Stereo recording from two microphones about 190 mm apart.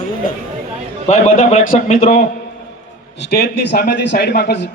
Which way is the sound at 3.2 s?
55° left (ahead or behind).